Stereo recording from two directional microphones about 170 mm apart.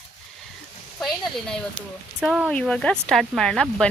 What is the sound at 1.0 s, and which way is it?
Speech, centre (ahead or behind).